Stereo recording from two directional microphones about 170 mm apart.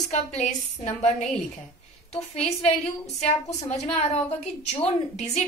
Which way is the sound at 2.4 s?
40° left (ahead or behind).